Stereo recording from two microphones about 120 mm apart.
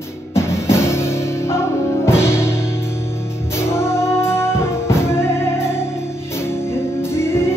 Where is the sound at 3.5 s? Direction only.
20° left (ahead or behind).